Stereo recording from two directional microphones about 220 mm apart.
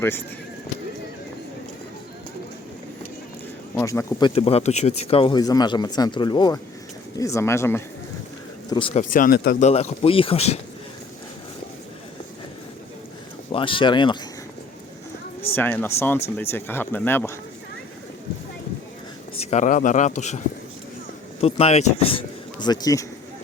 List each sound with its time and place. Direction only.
0.0 s speech: 10° left (ahead or behind)
3.8 s speech: 15° left (ahead or behind)
4.4 s speech: 25° left (ahead or behind); by 7.9 s 10° left (ahead or behind)
8.7 s speech: 25° left (ahead or behind)
9.1 s speech: 40° left (ahead or behind)
13.5 s speech: 25° left (ahead or behind)
15.5 s speech: 10° left (ahead or behind)
19.4 s speech: 30° left (ahead or behind)
21.4 s speech: 30° left (ahead or behind)